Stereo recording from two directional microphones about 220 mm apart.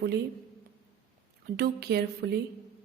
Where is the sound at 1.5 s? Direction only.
45° right (ahead or behind).